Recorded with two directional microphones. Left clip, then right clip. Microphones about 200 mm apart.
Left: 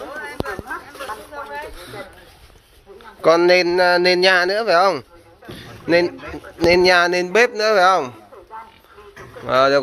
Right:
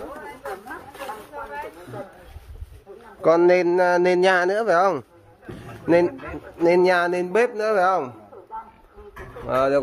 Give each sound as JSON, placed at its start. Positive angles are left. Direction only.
{"t": 3.2, "sound": "speech", "side_deg": -10}
{"t": 5.5, "sound": "a sound", "side_deg": -15}
{"t": 6.6, "sound": "speech", "side_deg": -5}
{"t": 9.5, "sound": "speech", "side_deg": 0}